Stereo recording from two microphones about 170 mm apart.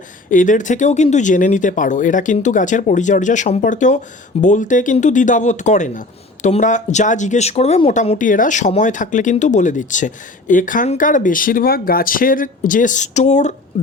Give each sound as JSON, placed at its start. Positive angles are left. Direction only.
{"t": 0.3, "sound": "speech", "side_deg": 50}
{"t": 8.2, "sound": "speech", "side_deg": 50}